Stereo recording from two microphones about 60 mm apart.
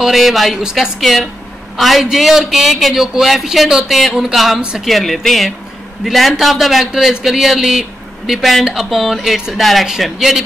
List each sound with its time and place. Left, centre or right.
0.0 s a man's voice: centre
4.6 s speech: centre
4.8 s a man's voice: centre